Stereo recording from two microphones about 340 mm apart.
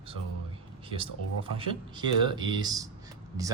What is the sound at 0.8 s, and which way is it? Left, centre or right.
Speech, centre.